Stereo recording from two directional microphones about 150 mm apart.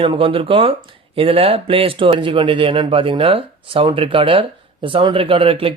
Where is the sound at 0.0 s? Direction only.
35° right (ahead or behind).